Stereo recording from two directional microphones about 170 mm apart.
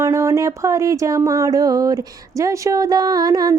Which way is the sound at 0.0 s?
20° right (ahead or behind).